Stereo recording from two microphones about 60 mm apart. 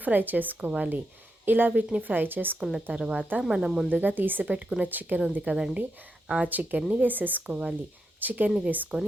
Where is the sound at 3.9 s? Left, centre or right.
Right.